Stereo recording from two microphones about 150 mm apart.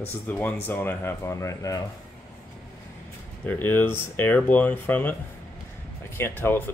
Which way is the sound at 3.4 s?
10° left (ahead or behind).